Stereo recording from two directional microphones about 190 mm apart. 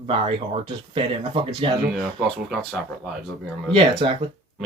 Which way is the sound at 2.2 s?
Centre (ahead or behind).